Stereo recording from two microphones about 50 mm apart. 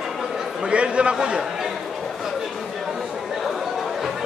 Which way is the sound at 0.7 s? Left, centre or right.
Right.